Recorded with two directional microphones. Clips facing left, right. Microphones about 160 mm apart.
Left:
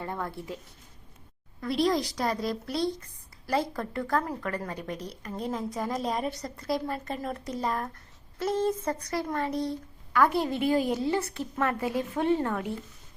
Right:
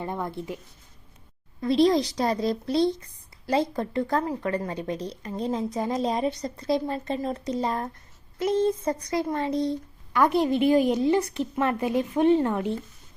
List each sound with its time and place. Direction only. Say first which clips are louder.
0.0 s speech: right 4 dB; 20° right (ahead or behind)
1.6 s speech: right 6 dB; 25° right (ahead or behind)